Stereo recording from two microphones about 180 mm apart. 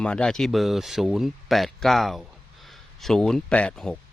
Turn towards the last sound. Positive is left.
turn(degrees=5)  # may be behind; listen again after turning